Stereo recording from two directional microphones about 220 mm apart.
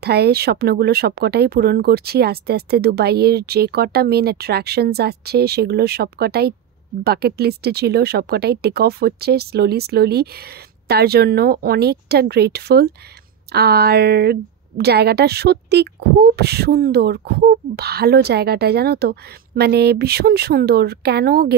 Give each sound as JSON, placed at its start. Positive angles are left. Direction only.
{"t": 0.0, "sound": "a woman's voice", "side_deg": -45}